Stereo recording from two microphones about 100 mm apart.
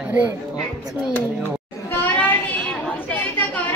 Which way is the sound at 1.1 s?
20° left (ahead or behind).